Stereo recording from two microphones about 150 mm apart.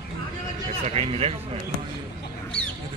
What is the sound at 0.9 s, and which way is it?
Speech, 45° right (ahead or behind).